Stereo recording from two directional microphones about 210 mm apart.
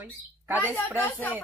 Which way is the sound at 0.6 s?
10° left (ahead or behind).